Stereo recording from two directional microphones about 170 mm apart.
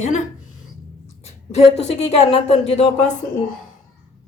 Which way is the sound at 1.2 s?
40° left (ahead or behind).